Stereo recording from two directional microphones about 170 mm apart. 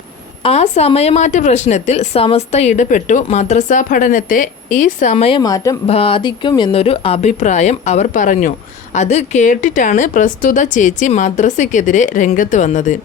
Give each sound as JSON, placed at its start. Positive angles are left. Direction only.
{"t": 0.4, "sound": "speech", "side_deg": 40}
{"t": 5.4, "sound": "speech", "side_deg": 20}
{"t": 5.8, "sound": "speech", "side_deg": 35}